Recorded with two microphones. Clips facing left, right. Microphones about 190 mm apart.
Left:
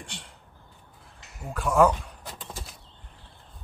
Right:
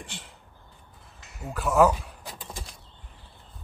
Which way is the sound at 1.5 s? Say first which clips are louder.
Even; 5° right (ahead or behind).